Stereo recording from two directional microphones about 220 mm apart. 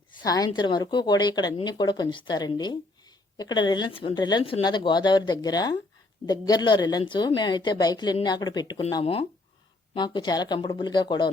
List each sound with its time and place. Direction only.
0.2 s speech: 15° left (ahead or behind)